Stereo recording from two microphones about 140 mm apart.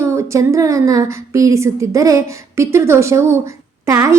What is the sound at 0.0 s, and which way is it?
A woman's voice, 20° right (ahead or behind).